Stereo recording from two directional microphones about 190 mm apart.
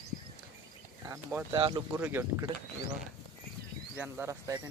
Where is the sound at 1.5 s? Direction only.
25° right (ahead or behind).